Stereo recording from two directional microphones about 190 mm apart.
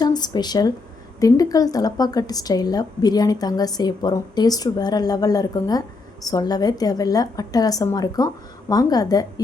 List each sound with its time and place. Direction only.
0.0 s a woman's voice: 20° left (ahead or behind)